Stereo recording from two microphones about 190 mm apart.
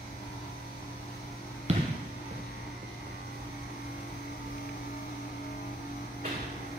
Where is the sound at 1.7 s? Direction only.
35° right (ahead or behind).